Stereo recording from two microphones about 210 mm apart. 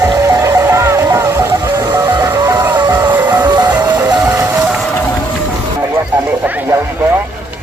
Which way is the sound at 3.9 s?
15° right (ahead or behind).